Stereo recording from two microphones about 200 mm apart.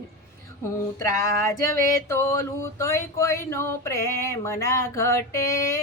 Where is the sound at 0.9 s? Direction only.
15° left (ahead or behind).